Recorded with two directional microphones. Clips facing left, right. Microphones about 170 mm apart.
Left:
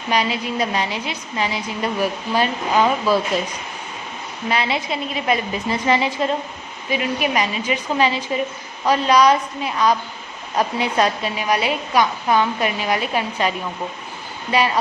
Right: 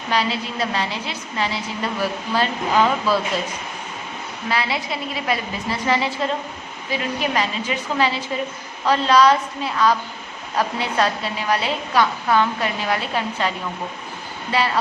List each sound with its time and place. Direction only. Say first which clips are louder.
0.1 s a woman's voice: left 2 dB; 15° left (ahead or behind)
4.4 s a woman's voice: left 2 dB; 20° left (ahead or behind)
14.5 s a woman's voice: left 3 dB; 15° left (ahead or behind)